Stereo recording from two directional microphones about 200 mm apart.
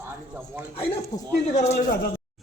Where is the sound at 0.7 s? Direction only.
30° left (ahead or behind).